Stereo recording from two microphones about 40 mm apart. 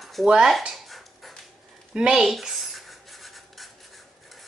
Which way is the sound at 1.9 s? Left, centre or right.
Centre.